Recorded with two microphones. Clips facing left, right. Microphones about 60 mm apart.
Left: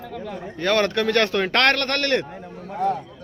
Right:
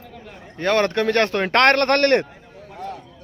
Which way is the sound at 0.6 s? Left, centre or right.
Right.